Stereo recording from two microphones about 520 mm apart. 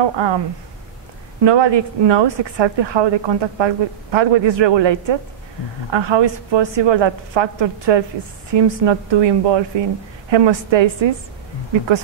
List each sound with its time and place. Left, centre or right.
0.0 s a woman's voice: right
1.4 s a woman's voice: right